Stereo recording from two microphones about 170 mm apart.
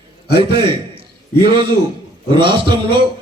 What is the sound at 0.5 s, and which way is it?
A man's voice, 30° right (ahead or behind).